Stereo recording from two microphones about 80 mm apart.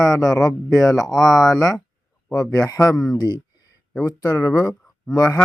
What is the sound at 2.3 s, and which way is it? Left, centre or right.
Speech, left.